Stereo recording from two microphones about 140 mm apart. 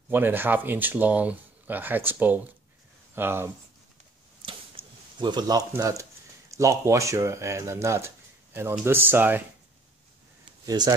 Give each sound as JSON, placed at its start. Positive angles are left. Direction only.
{"t": 0.1, "sound": "speech", "side_deg": -15}
{"t": 4.5, "sound": "a sound", "side_deg": -35}
{"t": 5.7, "sound": "speech", "side_deg": -25}
{"t": 10.6, "sound": "speech", "side_deg": -25}